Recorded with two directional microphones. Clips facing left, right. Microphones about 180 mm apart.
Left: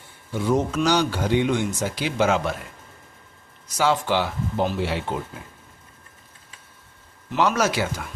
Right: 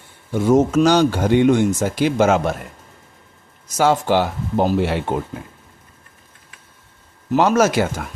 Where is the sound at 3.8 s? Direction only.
45° right (ahead or behind).